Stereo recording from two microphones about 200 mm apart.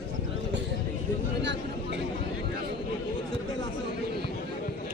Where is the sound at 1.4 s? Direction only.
60° right (ahead or behind).